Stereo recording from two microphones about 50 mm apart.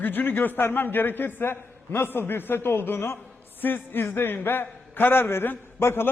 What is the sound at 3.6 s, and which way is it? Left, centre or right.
A man's voice, left.